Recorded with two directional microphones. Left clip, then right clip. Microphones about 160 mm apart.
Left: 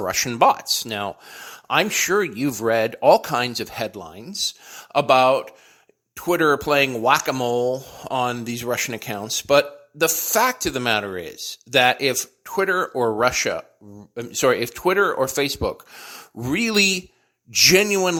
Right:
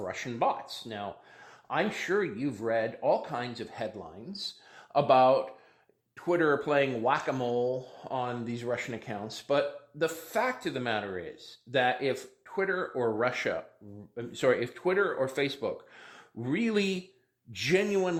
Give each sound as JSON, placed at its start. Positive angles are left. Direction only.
{"t": 0.0, "sound": "speech", "side_deg": 40}
{"t": 7.3, "sound": "speech", "side_deg": 40}